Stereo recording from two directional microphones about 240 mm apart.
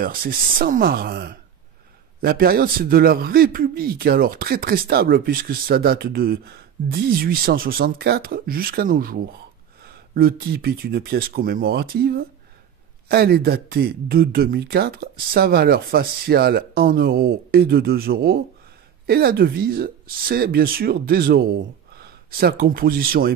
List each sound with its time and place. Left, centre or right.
0.0 s a man's voice: right